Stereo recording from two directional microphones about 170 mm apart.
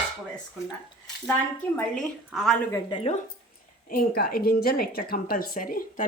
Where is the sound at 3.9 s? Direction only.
60° left (ahead or behind).